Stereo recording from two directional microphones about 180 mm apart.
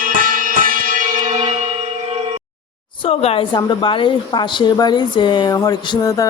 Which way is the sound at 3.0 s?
35° left (ahead or behind).